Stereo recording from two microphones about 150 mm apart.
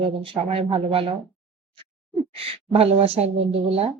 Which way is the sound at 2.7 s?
40° right (ahead or behind).